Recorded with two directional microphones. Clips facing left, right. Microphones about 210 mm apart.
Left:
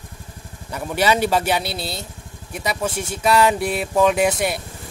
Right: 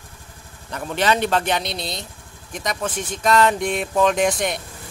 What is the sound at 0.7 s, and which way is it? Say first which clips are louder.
Speech: left 1 dB; 10° left (ahead or behind).